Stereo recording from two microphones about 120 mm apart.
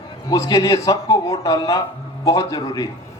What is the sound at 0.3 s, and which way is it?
A man's voice, 30° left (ahead or behind).